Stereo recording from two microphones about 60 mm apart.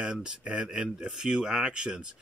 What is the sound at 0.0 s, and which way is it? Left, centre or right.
Speech, centre.